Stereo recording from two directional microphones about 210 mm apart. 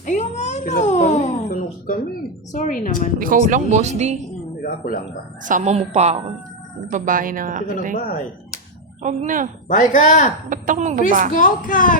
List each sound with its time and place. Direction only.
0.0 s a sound: 35° left (ahead or behind)
2.5 s speech: 35° left (ahead or behind)
3.2 s speech: 40° right (ahead or behind)
4.6 s speech: 40° left (ahead or behind)
5.5 s speech: 35° right (ahead or behind)
9.0 s speech: 35° right (ahead or behind)
9.6 s speech: 35° left (ahead or behind)
10.5 s speech: 35° right (ahead or behind)
11.3 s speech: 40° left (ahead or behind)